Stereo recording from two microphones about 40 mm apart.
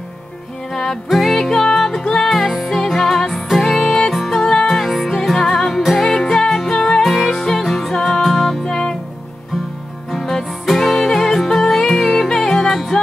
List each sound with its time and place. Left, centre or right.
1.1 s music: centre
3.8 s music: centre
4.1 s music: centre
4.8 s music: centre
8.6 s music: centre
10.1 s music: centre